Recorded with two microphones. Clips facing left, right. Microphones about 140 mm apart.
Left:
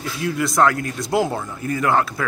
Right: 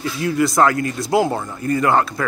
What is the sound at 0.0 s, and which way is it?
Speech, centre (ahead or behind).